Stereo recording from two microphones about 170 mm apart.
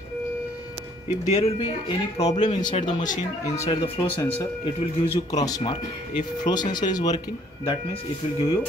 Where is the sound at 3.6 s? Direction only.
30° left (ahead or behind).